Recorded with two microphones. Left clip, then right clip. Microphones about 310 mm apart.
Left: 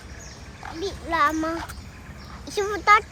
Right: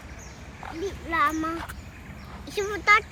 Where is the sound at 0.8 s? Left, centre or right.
Left.